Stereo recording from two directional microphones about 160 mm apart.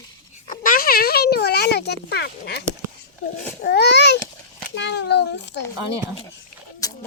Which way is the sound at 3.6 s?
90° left.